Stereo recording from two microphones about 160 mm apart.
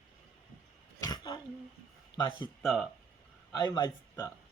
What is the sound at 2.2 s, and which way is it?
Speech, 30° left (ahead or behind).